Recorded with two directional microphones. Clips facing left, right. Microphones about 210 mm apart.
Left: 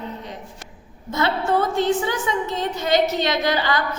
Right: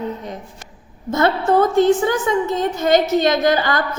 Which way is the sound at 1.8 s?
45° right (ahead or behind).